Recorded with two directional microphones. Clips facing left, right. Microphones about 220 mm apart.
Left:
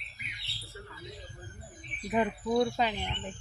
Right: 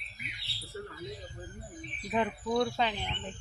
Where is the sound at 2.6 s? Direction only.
5° left (ahead or behind).